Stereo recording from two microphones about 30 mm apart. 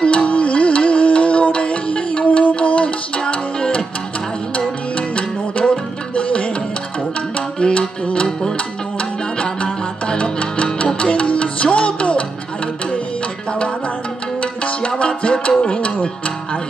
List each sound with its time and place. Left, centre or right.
0.0 s music: left
0.3 s music: left
2.2 s music: left
4.6 s music: left
7.6 s music: left
9.4 s music: left
14.4 s music: left